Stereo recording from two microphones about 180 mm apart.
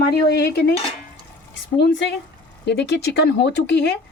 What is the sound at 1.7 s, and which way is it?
Speech, 70° left (ahead or behind).